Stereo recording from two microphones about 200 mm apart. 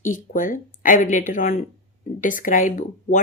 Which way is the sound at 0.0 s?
40° left (ahead or behind).